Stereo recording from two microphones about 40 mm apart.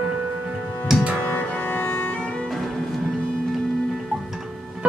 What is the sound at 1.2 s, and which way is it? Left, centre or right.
Music, left.